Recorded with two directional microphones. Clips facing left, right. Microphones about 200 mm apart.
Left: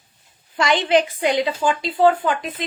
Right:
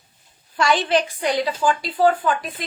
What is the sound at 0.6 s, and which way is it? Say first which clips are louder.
A woman's voice: left 2 dB; 20° left (ahead or behind).